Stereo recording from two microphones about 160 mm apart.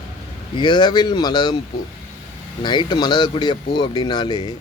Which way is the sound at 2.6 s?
30° left (ahead or behind).